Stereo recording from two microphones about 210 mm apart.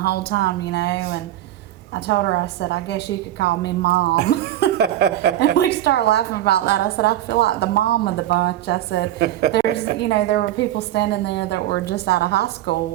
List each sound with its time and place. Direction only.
0.0 s a woman's voice: 50° left (ahead or behind)
2.0 s a woman's voice: 55° left (ahead or behind)
4.8 s speech: 50° right (ahead or behind)
5.5 s a woman's voice: 50° left (ahead or behind)
9.1 s speech: 50° right (ahead or behind)
9.5 s a woman's voice: 55° left (ahead or behind)